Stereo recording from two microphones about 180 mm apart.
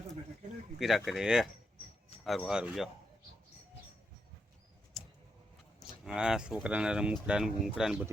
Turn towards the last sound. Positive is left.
turn(degrees=-5)  # may be behind; listen again after turning